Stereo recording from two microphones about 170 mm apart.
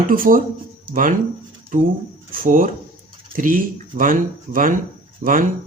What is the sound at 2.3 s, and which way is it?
Speech, 55° right (ahead or behind).